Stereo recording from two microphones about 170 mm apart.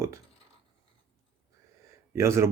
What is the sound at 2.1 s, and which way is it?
Speech, 15° right (ahead or behind).